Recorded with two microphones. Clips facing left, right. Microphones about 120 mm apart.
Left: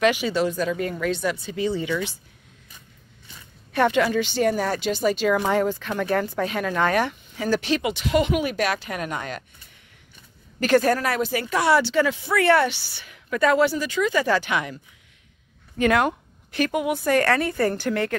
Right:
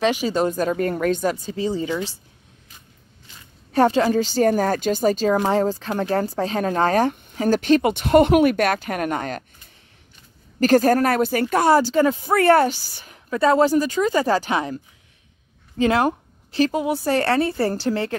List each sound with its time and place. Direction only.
0.0 s speech: 35° right (ahead or behind)
3.7 s speech: 35° right (ahead or behind)
10.6 s speech: 40° right (ahead or behind)
15.8 s a woman's voice: 30° right (ahead or behind)